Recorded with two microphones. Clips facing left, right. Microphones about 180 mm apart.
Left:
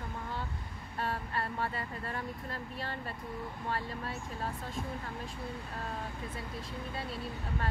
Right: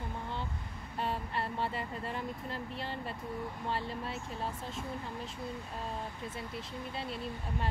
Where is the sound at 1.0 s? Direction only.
20° right (ahead or behind).